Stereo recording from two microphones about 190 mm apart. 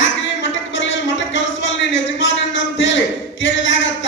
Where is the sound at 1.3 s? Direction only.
75° left (ahead or behind).